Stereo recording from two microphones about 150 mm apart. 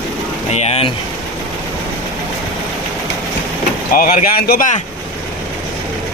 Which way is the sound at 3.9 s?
70° left (ahead or behind).